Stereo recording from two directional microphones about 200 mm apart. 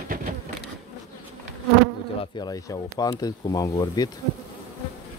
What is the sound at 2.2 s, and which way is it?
Speech, 20° left (ahead or behind).